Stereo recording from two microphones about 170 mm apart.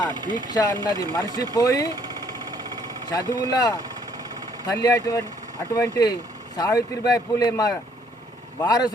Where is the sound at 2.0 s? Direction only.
25° right (ahead or behind).